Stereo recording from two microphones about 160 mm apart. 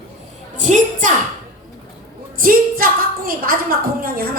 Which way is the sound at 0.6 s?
50° right (ahead or behind).